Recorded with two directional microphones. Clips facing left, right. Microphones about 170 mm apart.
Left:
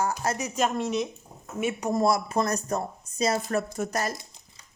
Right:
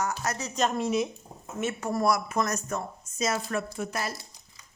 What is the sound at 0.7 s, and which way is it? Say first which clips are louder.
Speech: right 1 dB; centre (ahead or behind).